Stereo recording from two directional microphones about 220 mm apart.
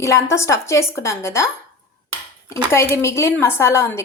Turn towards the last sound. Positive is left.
turn(degrees=10)  # may be behind; listen again after turning